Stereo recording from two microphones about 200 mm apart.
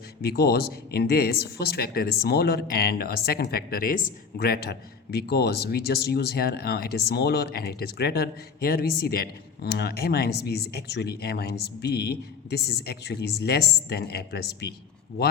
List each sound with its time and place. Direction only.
0.2 s speech: 50° left (ahead or behind)